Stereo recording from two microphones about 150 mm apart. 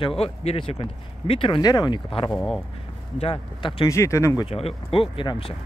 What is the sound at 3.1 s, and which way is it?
Speech, 35° left (ahead or behind).